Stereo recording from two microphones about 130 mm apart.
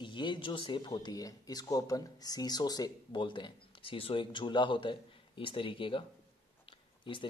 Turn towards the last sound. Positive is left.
turn(degrees=40)  # may be behind; listen again after turning